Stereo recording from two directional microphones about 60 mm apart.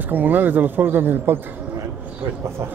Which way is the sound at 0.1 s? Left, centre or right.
Right.